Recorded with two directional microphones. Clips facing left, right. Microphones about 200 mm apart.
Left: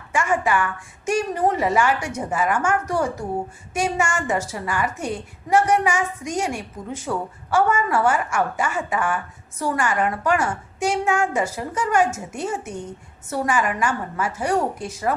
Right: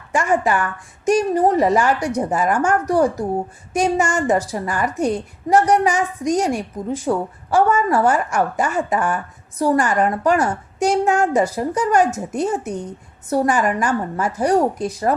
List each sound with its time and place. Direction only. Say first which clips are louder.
0.1 s a woman's voice: right 3 dB; 40° right (ahead or behind)